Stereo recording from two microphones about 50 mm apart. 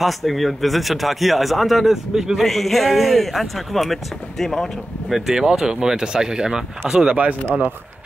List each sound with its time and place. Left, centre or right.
0.0 s a man's voice: centre
5.1 s speech: centre
7.2 s speech: right